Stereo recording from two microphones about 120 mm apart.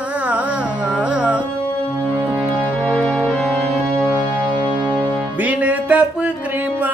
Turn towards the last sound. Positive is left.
turn(degrees=-10)  # may be behind; listen again after turning